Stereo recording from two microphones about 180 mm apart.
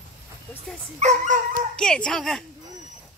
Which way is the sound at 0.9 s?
40° right (ahead or behind).